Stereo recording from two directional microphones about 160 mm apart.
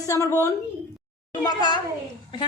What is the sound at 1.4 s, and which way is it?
Speech, 25° left (ahead or behind).